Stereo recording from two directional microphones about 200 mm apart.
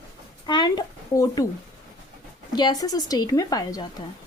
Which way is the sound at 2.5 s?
20° left (ahead or behind).